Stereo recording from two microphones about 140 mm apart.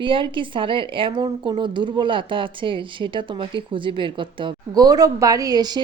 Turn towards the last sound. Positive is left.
turn(degrees=-30)  # may be behind; listen again after turning